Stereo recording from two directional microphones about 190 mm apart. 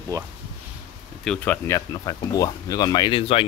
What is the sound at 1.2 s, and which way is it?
Speech, 5° left (ahead or behind).